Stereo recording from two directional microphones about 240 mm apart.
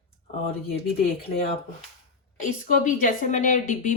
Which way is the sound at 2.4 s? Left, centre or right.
Left.